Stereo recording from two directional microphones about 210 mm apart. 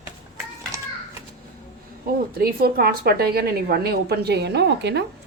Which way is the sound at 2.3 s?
45° right (ahead or behind).